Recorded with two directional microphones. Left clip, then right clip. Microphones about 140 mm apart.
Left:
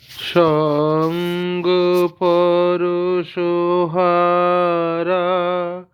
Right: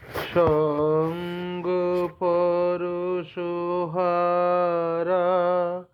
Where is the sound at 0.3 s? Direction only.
70° left (ahead or behind).